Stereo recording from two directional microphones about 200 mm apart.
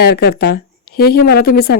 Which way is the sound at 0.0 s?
55° left (ahead or behind).